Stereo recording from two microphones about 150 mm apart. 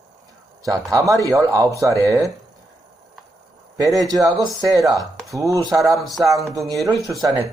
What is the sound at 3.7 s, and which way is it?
A man's voice, 25° right (ahead or behind).